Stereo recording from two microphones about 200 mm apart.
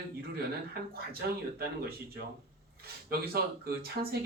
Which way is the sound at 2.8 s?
50° right (ahead or behind).